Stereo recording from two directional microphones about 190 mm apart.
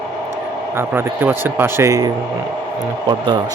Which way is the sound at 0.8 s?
10° right (ahead or behind).